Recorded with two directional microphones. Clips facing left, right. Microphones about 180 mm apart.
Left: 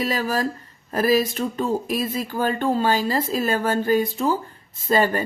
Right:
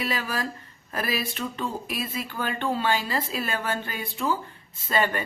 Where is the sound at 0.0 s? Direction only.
40° left (ahead or behind).